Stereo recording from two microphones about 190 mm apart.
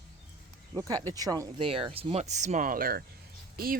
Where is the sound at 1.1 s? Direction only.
20° right (ahead or behind).